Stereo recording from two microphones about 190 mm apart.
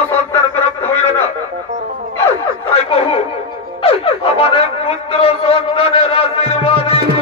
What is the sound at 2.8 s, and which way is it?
Speech, 30° left (ahead or behind).